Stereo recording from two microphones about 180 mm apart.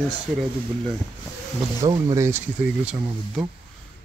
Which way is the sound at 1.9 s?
20° right (ahead or behind).